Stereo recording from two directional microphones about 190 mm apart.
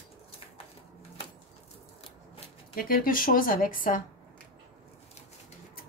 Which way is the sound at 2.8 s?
50° left (ahead or behind).